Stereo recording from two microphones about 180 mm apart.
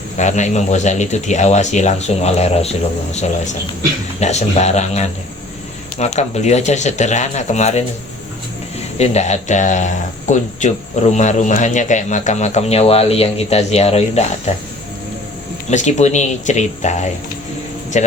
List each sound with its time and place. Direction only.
0.2 s speech: 40° left (ahead or behind)
9.0 s speech: 40° left (ahead or behind)
15.7 s speech: 40° left (ahead or behind)